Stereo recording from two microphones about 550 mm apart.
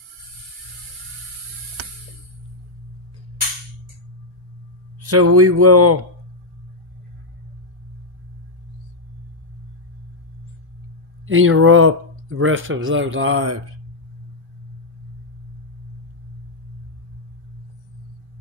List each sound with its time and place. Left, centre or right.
5.0 s speech: right
11.2 s speech: right